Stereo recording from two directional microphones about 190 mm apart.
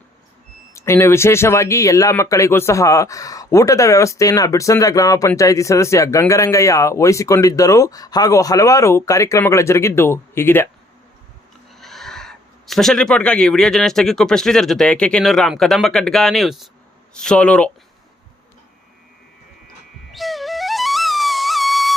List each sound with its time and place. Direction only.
0.7 s speech: 15° left (ahead or behind)
11.8 s speech: centre (ahead or behind)
19.6 s flute: centre (ahead or behind)